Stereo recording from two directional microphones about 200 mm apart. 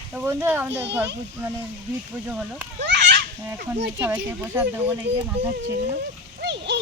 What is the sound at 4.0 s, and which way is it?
Speech, 10° right (ahead or behind).